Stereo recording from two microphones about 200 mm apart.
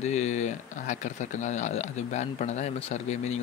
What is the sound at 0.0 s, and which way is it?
Speech, 35° left (ahead or behind).